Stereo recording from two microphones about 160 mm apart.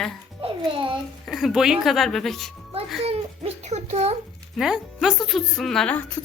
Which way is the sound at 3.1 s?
40° right (ahead or behind).